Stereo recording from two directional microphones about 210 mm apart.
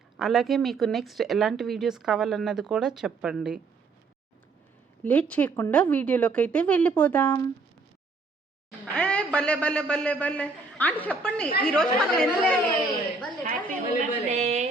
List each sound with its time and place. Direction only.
0.2 s a woman's voice: centre (ahead or behind)
5.0 s a man's voice: 5° left (ahead or behind)
9.0 s a man's voice: 5° left (ahead or behind)
14.3 s a sound: 30° right (ahead or behind)